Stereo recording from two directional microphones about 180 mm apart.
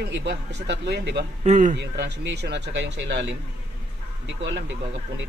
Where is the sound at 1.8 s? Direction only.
70° right (ahead or behind).